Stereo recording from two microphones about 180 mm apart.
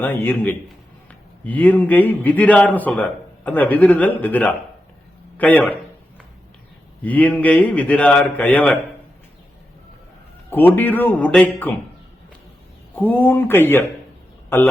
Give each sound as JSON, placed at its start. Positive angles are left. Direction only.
{"t": 0.0, "sound": "a man's voice", "side_deg": 10}
{"t": 7.0, "sound": "a man's voice", "side_deg": 10}
{"t": 10.5, "sound": "a man's voice", "side_deg": 10}
{"t": 13.0, "sound": "a man's voice", "side_deg": 10}